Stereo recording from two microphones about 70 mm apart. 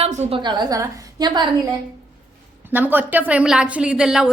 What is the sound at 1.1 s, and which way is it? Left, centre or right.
Speech, right.